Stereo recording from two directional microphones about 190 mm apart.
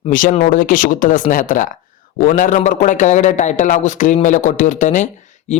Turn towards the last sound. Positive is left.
turn(degrees=35)  # may be behind; listen again after turning